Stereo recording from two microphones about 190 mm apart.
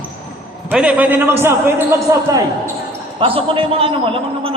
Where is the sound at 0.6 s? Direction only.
5° right (ahead or behind).